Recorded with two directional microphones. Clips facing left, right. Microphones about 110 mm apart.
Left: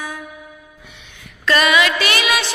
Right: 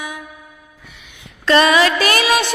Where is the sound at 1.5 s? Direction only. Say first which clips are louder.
Right 3 dB; 30° right (ahead or behind).